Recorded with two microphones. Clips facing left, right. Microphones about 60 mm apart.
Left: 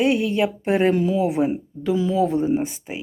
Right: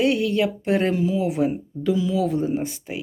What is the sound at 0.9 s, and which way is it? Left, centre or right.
Speech, left.